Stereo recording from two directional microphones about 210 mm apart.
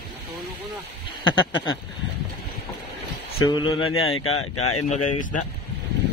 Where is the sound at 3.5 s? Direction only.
20° left (ahead or behind).